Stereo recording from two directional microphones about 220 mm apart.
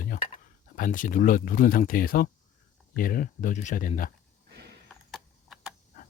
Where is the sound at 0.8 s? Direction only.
35° left (ahead or behind).